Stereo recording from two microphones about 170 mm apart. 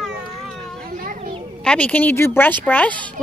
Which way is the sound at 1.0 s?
50° right (ahead or behind).